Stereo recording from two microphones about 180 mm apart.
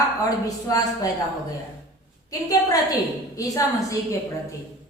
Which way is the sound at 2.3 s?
20° left (ahead or behind).